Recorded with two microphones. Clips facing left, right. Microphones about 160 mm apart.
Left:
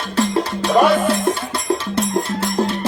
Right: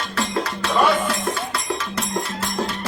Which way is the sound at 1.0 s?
30° left (ahead or behind).